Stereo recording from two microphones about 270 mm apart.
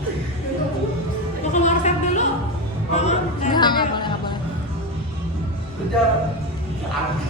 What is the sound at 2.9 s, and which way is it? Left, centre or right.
Music, left.